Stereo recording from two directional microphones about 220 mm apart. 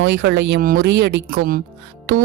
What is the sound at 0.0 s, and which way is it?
Speech, 50° right (ahead or behind).